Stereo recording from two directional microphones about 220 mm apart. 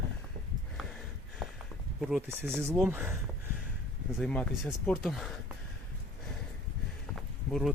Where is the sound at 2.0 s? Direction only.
Centre (ahead or behind).